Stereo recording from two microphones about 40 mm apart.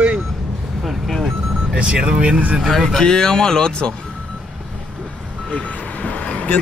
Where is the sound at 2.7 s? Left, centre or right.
Centre.